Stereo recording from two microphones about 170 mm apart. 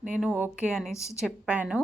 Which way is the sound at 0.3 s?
10° right (ahead or behind).